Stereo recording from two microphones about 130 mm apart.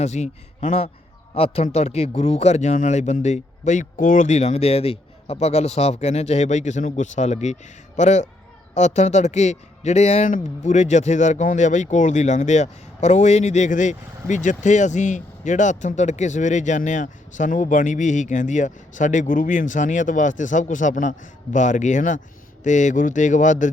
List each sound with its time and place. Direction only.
0.0 s a man's voice: 60° left (ahead or behind); by 23.6 s 75° left (ahead or behind)